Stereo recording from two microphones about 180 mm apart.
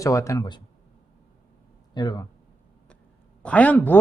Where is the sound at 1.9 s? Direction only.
25° left (ahead or behind).